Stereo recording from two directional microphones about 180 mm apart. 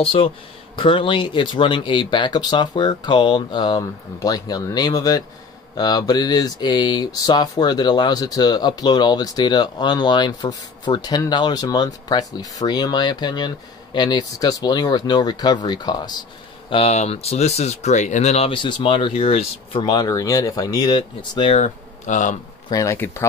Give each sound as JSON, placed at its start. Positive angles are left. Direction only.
{"t": 0.0, "sound": "speech", "side_deg": 30}
{"t": 16.7, "sound": "speech", "side_deg": 35}
{"t": 21.5, "sound": "speech", "side_deg": 40}
{"t": 22.7, "sound": "speech", "side_deg": 15}